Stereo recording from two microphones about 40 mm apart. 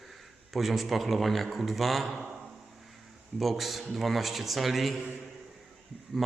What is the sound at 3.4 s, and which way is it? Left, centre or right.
Speech, centre.